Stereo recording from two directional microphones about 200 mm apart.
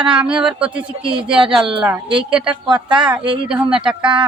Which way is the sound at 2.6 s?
25° right (ahead or behind).